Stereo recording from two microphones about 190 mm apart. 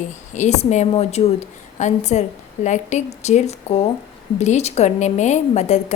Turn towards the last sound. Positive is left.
turn(degrees=35)  # may be behind; listen again after turning